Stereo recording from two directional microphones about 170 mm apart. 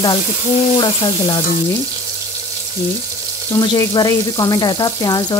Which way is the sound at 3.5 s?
20° left (ahead or behind).